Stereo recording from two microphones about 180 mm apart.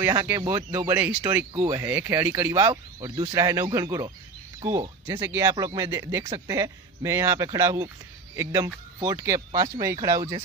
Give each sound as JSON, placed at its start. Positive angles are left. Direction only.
{"t": 0.0, "sound": "speech", "side_deg": -15}